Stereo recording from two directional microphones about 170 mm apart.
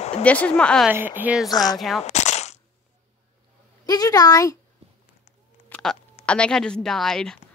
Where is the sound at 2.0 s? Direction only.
40° left (ahead or behind).